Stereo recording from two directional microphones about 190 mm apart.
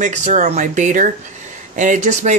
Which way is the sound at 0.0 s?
40° right (ahead or behind).